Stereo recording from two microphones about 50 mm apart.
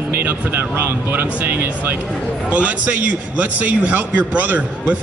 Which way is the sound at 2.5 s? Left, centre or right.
Right.